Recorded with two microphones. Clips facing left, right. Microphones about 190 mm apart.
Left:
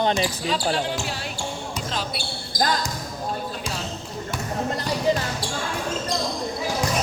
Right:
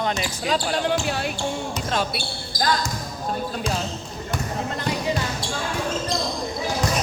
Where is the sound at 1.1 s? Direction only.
60° right (ahead or behind).